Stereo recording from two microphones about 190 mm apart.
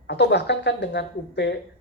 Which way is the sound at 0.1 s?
65° left (ahead or behind).